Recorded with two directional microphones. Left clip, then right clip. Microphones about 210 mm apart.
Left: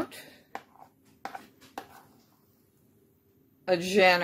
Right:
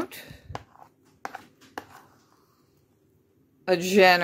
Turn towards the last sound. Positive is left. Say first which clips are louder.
# right 4 dB
turn(degrees=-30)  # may be behind; listen again after turning